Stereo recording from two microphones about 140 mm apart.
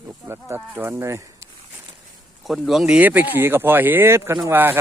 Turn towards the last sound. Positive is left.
turn(degrees=-15)  # may be behind; listen again after turning